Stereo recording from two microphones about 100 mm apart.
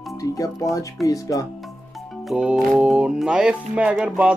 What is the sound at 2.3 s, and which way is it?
Speech, 5° right (ahead or behind).